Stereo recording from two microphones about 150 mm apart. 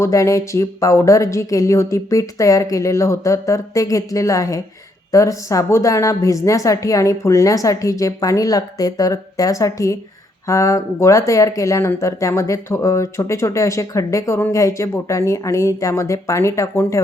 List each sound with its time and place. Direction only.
0.0 s speech: 20° left (ahead or behind)